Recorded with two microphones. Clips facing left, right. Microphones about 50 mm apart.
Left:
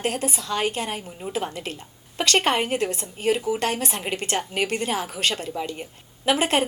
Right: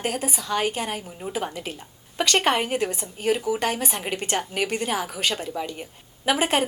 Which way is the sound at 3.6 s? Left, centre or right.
Centre.